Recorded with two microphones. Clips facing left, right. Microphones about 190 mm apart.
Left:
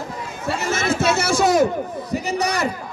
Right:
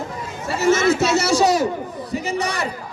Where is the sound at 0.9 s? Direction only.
50° left (ahead or behind).